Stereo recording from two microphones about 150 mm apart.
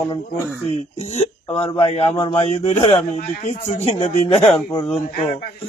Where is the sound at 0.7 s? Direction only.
45° left (ahead or behind).